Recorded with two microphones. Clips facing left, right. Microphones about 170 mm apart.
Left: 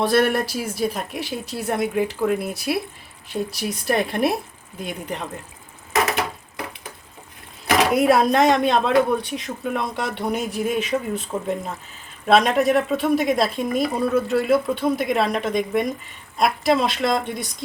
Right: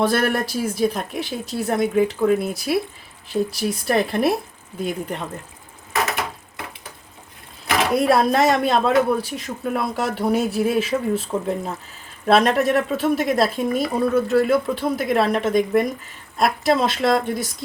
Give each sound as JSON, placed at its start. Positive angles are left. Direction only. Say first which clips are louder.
{"t": 0.0, "sound": "speech", "louder": "left 1 dB", "side_deg": 0}
{"t": 7.9, "sound": "speech", "louder": "right 1 dB", "side_deg": 0}